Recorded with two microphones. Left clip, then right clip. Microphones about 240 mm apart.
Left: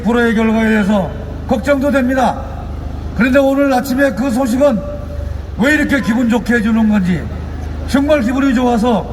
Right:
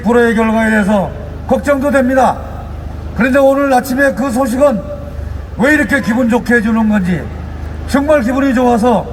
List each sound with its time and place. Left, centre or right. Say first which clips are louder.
0.1 s a man's voice: right 3 dB; centre